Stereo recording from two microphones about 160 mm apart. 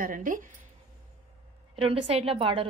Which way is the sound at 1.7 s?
35° right (ahead or behind).